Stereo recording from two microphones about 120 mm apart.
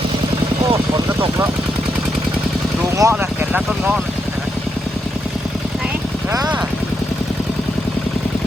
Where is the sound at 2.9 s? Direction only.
20° right (ahead or behind).